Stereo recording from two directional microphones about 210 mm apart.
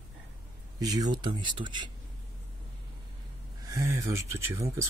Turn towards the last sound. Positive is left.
turn(degrees=-15)  # may be behind; listen again after turning